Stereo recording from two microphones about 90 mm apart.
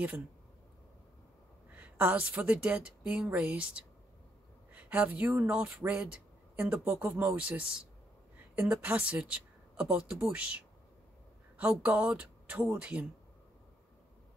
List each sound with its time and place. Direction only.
1.8 s a woman's voice: 15° right (ahead or behind)